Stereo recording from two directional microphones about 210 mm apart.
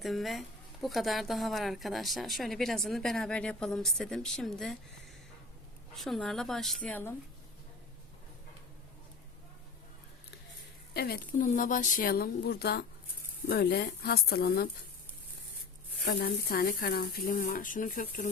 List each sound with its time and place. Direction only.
0.0 s a woman's voice: centre (ahead or behind)
5.9 s a woman's voice: centre (ahead or behind)
10.9 s speech: 50° left (ahead or behind)
16.0 s speech: 45° left (ahead or behind)